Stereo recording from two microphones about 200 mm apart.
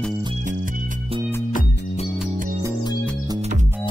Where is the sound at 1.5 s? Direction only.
45° left (ahead or behind).